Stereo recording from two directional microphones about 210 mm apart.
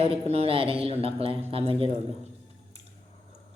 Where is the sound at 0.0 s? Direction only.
30° right (ahead or behind).